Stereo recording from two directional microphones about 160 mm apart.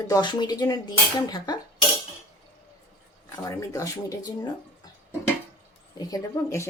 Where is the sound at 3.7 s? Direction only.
20° left (ahead or behind).